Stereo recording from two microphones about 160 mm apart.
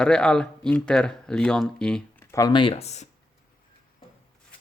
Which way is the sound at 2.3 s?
25° left (ahead or behind).